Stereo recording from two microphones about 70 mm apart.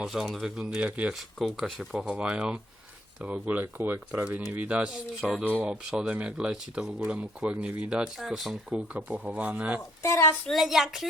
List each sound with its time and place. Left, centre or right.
0.0 s speech: centre
0.8 s speech: centre
1.4 s speech: centre
2.0 s speech: centre; by 4.2 s right
4.2 s speech: centre
5.8 s speech: centre
8.2 s speech: centre
8.7 s speech: centre
10.0 s a woman's voice: left
10.5 s speech: centre